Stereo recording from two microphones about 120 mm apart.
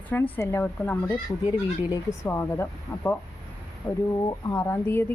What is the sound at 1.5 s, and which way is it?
Speech, 25° left (ahead or behind).